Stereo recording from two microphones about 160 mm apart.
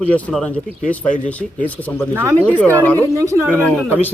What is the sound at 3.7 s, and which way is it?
Speech, 10° left (ahead or behind).